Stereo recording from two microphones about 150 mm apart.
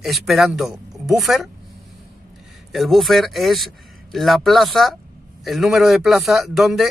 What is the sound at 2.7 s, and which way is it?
Speech, centre (ahead or behind).